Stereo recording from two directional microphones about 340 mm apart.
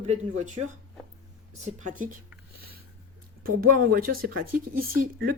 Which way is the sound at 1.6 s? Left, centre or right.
Right.